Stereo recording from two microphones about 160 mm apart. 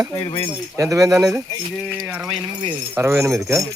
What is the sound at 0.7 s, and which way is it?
Speech, 20° right (ahead or behind).